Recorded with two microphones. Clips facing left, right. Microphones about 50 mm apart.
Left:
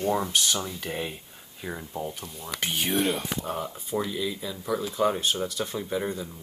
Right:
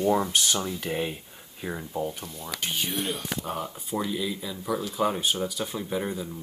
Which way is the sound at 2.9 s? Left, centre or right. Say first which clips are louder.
Left 5 dB; left.